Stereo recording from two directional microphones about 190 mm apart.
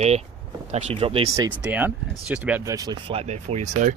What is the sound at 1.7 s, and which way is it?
Speech, 10° right (ahead or behind).